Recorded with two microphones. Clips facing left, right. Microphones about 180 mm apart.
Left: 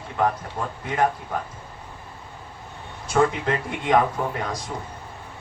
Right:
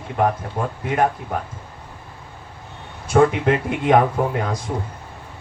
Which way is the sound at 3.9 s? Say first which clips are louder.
Right 4 dB; 45° right (ahead or behind).